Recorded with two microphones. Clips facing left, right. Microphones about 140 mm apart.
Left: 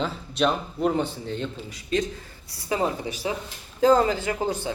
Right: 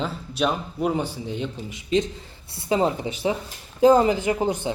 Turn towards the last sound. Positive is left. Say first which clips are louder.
# right 3 dB
turn(degrees=-20)  # may be behind; listen again after turning